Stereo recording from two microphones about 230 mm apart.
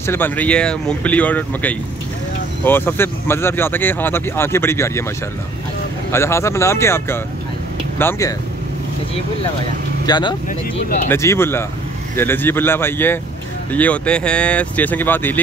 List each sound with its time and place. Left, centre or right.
0.0 s speech: centre
6.1 s speech: centre
10.0 s speech: centre